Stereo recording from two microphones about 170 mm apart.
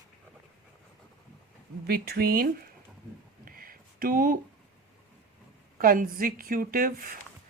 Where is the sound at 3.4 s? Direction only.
55° right (ahead or behind).